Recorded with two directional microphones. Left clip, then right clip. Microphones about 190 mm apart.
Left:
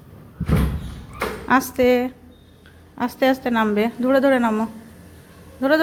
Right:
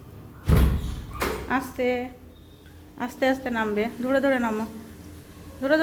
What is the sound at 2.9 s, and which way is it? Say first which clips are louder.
A woman's voice: left 5 dB; 20° left (ahead or behind).